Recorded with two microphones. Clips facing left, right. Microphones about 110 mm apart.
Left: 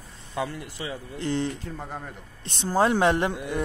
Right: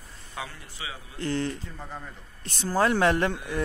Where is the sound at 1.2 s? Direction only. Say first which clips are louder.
Left 1 dB; 20° left (ahead or behind).